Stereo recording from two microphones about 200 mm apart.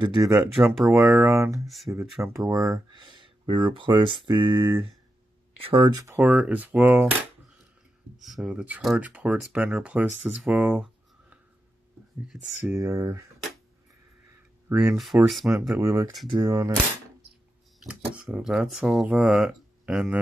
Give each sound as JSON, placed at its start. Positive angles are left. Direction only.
{"t": 0.0, "sound": "speech", "side_deg": -20}
{"t": 0.6, "sound": "speech", "side_deg": 0}
{"t": 0.9, "sound": "speech", "side_deg": -15}
{"t": 12.7, "sound": "speech", "side_deg": -15}
{"t": 14.7, "sound": "speech", "side_deg": -10}
{"t": 15.0, "sound": "speech", "side_deg": 0}
{"t": 15.8, "sound": "speech", "side_deg": -15}
{"t": 17.7, "sound": "speech", "side_deg": -5}